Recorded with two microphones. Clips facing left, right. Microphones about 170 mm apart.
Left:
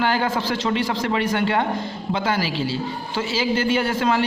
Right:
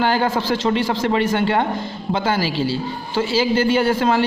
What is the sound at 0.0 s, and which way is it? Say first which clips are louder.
A man's voice: right 3 dB; 30° right (ahead or behind).